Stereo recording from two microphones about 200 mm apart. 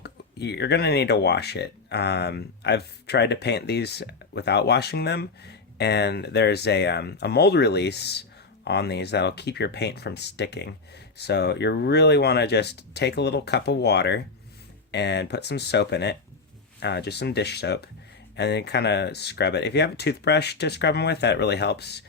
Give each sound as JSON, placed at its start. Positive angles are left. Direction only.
{"t": 0.0, "sound": "speech", "side_deg": 55}